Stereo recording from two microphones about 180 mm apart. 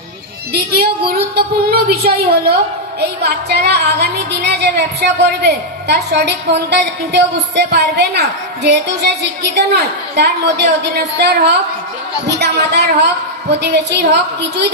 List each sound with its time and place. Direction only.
0.5 s child singing: 60° right (ahead or behind)
1.4 s a woman's voice: 60° right (ahead or behind)
3.5 s a woman's voice: 65° right (ahead or behind)